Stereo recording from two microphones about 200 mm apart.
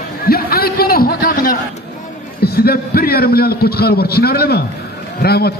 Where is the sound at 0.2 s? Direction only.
50° left (ahead or behind).